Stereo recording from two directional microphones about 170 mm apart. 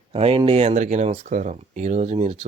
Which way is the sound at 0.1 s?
35° right (ahead or behind).